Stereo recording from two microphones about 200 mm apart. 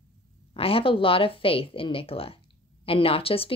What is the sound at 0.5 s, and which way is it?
A woman's voice, 30° left (ahead or behind).